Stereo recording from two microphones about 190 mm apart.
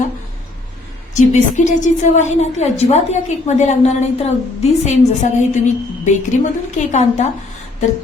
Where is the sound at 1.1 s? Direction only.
40° left (ahead or behind).